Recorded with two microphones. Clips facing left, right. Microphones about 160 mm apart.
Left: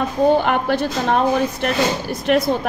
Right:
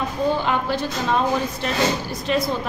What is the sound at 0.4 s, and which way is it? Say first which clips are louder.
A woman's voice: left 4 dB; 60° left (ahead or behind).